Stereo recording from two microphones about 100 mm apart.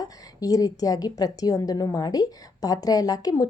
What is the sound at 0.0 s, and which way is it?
A woman's voice, 35° left (ahead or behind).